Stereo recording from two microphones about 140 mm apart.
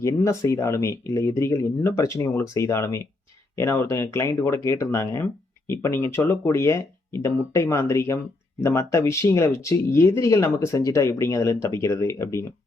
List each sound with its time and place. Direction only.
0.0 s speech: 20° left (ahead or behind)